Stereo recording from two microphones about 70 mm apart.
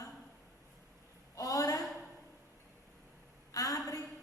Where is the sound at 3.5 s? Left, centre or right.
Left.